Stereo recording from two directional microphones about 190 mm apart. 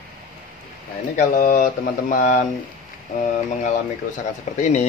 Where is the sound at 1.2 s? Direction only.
45° left (ahead or behind).